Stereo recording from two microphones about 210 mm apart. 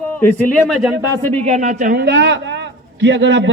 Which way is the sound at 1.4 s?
35° right (ahead or behind).